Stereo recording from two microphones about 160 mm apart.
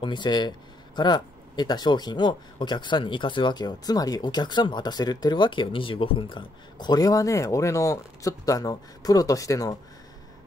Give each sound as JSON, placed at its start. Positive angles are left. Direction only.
{"t": 0.0, "sound": "speech", "side_deg": 30}